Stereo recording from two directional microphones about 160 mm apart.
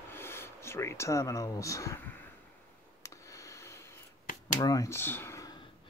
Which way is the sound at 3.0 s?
20° left (ahead or behind).